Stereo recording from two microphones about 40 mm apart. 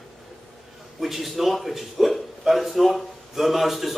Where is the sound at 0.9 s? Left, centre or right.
Centre.